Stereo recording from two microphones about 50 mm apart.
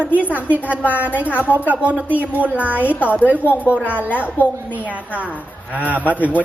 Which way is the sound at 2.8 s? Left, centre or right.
Left.